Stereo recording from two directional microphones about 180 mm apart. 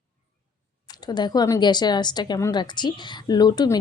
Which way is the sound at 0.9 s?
25° left (ahead or behind).